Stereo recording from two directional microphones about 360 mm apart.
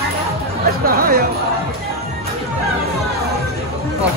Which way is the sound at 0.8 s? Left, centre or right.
Right.